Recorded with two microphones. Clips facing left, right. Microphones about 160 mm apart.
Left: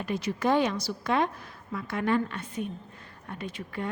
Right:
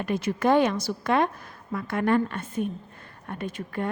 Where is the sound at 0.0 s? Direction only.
50° right (ahead or behind).